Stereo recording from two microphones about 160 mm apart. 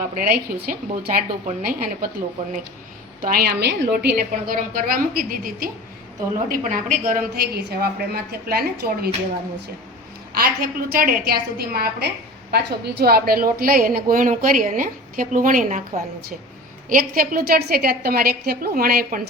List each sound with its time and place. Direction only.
0.0 s a woman's voice: 60° right (ahead or behind)
3.2 s a woman's voice: 65° right (ahead or behind)
6.5 s a woman's voice: 50° right (ahead or behind); by 9.0 s 75° right (ahead or behind)
10.3 s a woman's voice: 70° right (ahead or behind)
12.5 s a woman's voice: 90° right; by 15.8 s 55° right (ahead or behind)
16.9 s a woman's voice: 60° right (ahead or behind)